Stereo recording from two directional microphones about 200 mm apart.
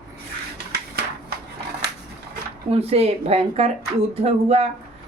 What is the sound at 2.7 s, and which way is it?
Speech, 30° right (ahead or behind).